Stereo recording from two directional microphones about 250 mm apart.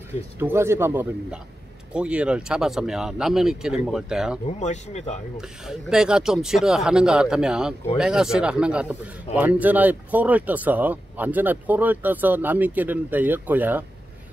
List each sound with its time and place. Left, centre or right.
0.4 s a man's voice: centre
4.5 s speech: left
5.4 s a man's voice: centre